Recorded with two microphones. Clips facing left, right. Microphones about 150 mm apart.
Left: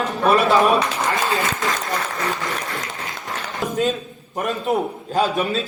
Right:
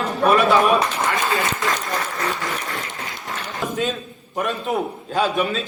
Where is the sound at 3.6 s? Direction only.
40° left (ahead or behind).